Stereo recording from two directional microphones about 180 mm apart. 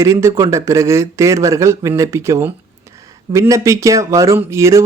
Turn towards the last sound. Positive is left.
turn(degrees=-15)  # may be behind; listen again after turning